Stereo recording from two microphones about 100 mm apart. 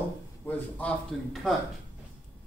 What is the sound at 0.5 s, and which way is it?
Speech, 15° left (ahead or behind).